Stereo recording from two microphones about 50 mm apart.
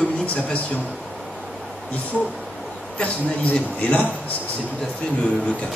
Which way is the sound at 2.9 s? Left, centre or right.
Left.